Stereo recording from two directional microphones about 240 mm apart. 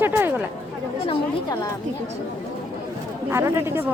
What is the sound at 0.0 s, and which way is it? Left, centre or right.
Chatter, centre.